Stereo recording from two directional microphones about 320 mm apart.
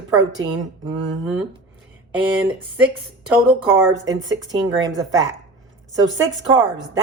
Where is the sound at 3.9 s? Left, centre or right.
Right.